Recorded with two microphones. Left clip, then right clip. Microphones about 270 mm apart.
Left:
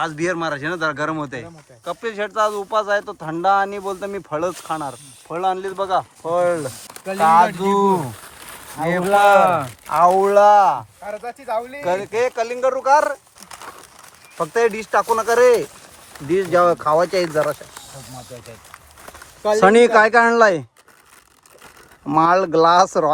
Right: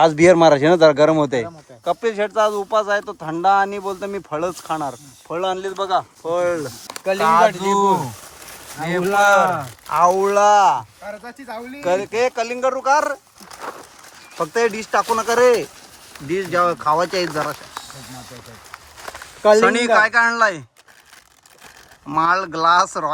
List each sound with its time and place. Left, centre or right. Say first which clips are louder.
0.0 s a man's voice: right 11 dB; centre
6.9 s a sound: right 9 dB; right
7.2 s a man's voice: left 1 dB; centre
9.3 s speech: left 2 dB; left
9.9 s a man's voice: left 2 dB; centre
11.0 s speech: left 4 dB; centre
11.8 s a man's voice: right 4 dB; centre
14.3 s a man's voice: left 1 dB; centre
18.7 s a sound: right 5 dB; right
19.5 s speech: left 8 dB; centre
22.0 s speech: left 2 dB; centre